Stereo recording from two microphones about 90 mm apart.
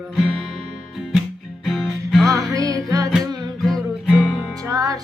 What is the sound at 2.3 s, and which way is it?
Music, 40° right (ahead or behind).